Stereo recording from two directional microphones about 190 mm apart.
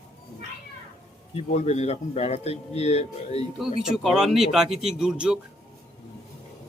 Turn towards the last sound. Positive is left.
turn(degrees=-5)  # may be behind; listen again after turning